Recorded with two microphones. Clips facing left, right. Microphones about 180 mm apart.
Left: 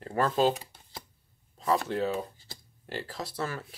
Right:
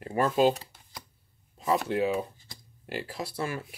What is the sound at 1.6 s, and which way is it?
Speech, 5° right (ahead or behind).